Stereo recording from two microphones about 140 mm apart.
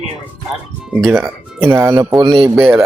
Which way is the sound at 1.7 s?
20° right (ahead or behind).